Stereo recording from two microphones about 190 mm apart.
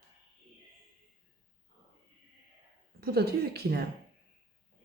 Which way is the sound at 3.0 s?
55° right (ahead or behind).